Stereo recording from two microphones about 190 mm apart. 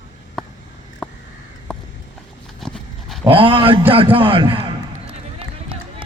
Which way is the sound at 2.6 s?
Centre (ahead or behind).